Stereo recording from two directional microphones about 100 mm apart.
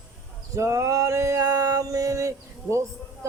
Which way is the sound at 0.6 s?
30° right (ahead or behind).